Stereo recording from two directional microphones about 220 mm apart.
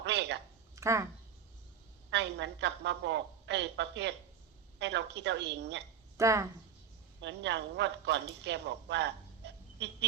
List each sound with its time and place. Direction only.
0.0 s a sound: 50° right (ahead or behind)
0.8 s speech: 15° right (ahead or behind)
2.0 s a woman's voice: 50° right (ahead or behind)
6.1 s a woman's voice: 15° right (ahead or behind)
7.2 s speech: 55° right (ahead or behind)